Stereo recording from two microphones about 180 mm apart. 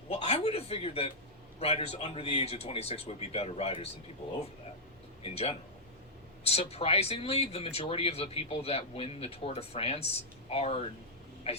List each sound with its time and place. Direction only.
0.1 s a sound: 35° left (ahead or behind)
1.5 s speech: 35° left (ahead or behind)
5.2 s speech: 35° left (ahead or behind)